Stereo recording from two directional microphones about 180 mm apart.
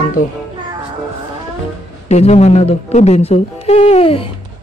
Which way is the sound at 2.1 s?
35° left (ahead or behind).